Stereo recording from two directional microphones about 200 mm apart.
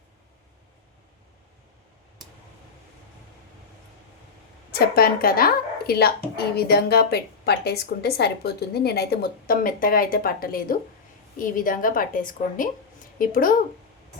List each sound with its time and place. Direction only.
4.7 s a woman's voice: 50° left (ahead or behind)